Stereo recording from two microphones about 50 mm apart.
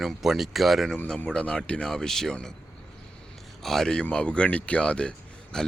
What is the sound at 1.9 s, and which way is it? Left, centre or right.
Speech, centre.